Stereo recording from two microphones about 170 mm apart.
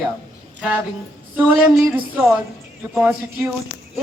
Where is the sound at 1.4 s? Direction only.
5° right (ahead or behind).